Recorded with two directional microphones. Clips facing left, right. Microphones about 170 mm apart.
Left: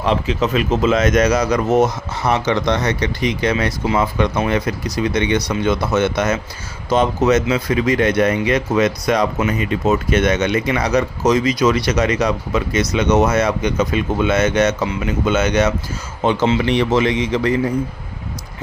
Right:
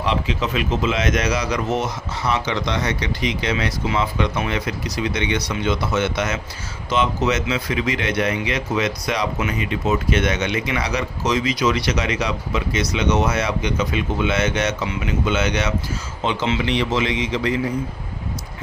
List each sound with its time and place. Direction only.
0.0 s speech: 45° left (ahead or behind)